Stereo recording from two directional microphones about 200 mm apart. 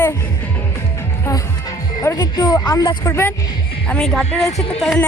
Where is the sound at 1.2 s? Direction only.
20° left (ahead or behind); by 5.0 s centre (ahead or behind).